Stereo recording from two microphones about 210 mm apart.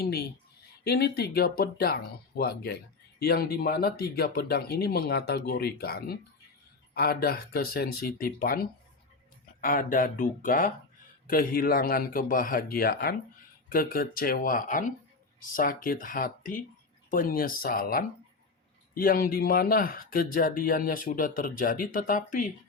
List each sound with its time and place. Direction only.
0.0 s speech: 50° left (ahead or behind)